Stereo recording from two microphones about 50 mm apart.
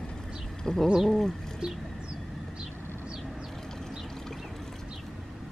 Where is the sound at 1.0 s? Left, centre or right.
Centre.